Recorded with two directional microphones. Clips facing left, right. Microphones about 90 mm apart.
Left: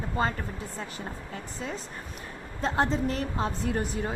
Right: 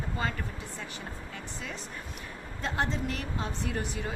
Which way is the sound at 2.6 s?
35° left (ahead or behind).